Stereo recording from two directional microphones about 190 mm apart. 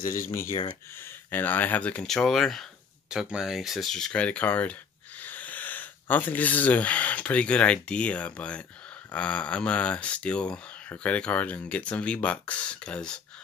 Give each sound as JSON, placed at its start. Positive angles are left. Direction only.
{"t": 0.0, "sound": "speech", "side_deg": 45}
{"t": 0.3, "sound": "speech", "side_deg": 15}